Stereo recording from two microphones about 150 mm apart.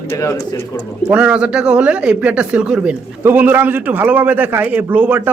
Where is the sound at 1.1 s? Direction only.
5° right (ahead or behind).